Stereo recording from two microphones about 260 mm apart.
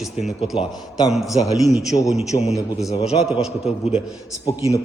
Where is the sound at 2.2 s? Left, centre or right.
Left.